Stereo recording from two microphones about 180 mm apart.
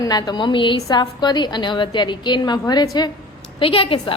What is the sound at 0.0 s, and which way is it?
A woman's voice, 20° left (ahead or behind).